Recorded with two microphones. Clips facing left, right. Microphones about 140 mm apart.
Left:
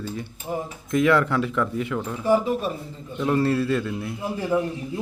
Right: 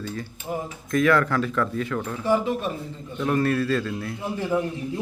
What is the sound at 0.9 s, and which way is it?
A man's voice, 20° left (ahead or behind).